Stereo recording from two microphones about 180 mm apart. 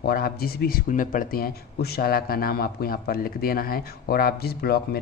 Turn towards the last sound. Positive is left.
turn(degrees=60)  # may be behind; listen again after turning